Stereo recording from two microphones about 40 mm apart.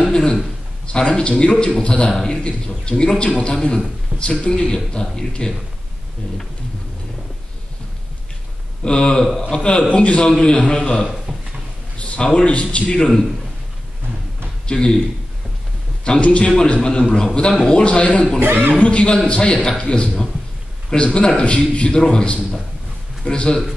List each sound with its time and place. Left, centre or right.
0.0 s a sound: centre
0.9 s a man's voice: left
8.8 s a man's voice: left
11.3 s a sound: centre
12.4 s a man's voice: left
14.7 s a man's voice: centre
16.2 s a man's voice: left
16.4 s a man's voice: left
18.4 s speech: right
18.8 s a man's voice: left